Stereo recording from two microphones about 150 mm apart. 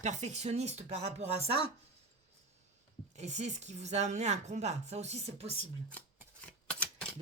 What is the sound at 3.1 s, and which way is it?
Speech, 50° right (ahead or behind).